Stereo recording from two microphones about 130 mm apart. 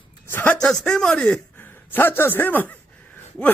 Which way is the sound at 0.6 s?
5° left (ahead or behind).